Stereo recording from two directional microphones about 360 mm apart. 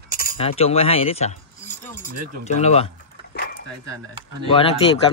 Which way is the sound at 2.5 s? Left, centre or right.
Centre.